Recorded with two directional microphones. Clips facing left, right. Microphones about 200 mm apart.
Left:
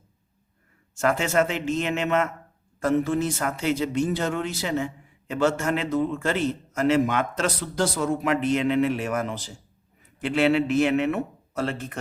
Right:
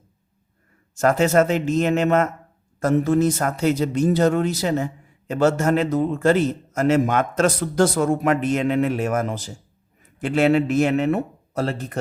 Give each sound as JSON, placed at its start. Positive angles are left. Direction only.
{"t": 0.9, "sound": "a man's voice", "side_deg": -40}